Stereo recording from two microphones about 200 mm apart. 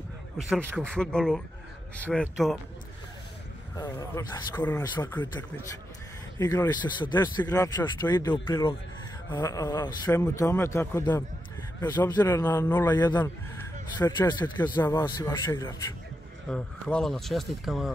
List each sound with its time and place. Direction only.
0.5 s speech: 5° right (ahead or behind)
0.8 s speech: 5° left (ahead or behind)
3.7 s speech: 20° left (ahead or behind)
6.4 s speech: 15° left (ahead or behind)
16.4 s speech: 5° left (ahead or behind)